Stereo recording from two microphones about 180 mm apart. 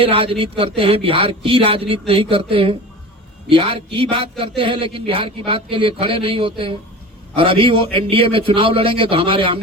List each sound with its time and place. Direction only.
0.0 s a man's voice: 30° right (ahead or behind)